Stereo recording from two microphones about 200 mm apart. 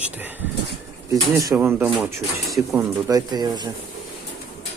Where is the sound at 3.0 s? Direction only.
20° right (ahead or behind).